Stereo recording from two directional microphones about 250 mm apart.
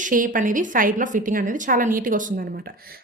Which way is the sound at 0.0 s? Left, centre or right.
Right.